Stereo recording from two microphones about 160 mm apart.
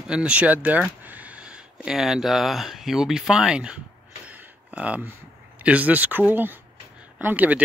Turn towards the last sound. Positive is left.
turn(degrees=-10)  # may be behind; listen again after turning